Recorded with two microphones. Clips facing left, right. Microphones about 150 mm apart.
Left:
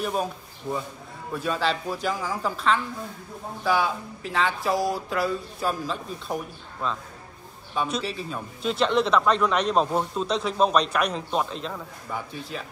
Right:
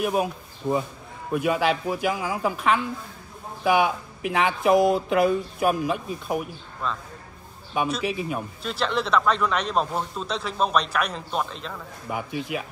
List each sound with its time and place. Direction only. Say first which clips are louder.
0.0 s speech: right 3 dB; 10° right (ahead or behind)
1.3 s speech: right 4 dB; 15° right (ahead or behind)
8.0 s speech: right 4 dB; 15° right (ahead or behind)
8.6 s speech: left 4 dB; centre (ahead or behind)
12.1 s speech: right 3 dB; 15° right (ahead or behind)